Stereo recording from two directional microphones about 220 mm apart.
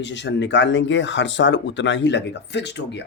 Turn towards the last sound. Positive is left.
turn(degrees=50)  # may be behind; listen again after turning